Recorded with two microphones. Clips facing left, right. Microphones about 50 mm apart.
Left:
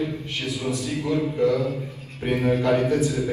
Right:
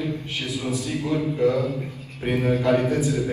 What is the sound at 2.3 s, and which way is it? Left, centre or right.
Speech, left.